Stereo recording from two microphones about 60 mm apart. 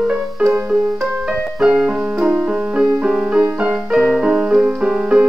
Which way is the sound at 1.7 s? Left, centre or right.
Centre.